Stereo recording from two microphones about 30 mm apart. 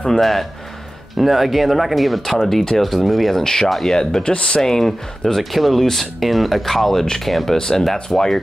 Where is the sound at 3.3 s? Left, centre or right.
Centre.